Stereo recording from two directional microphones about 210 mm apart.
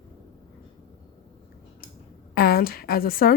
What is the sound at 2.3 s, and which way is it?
Speech, 45° left (ahead or behind).